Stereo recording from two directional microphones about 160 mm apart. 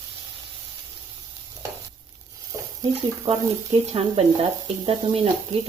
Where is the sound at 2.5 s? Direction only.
20° right (ahead or behind).